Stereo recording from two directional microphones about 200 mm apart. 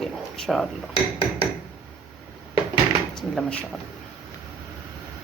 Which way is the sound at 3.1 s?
5° left (ahead or behind).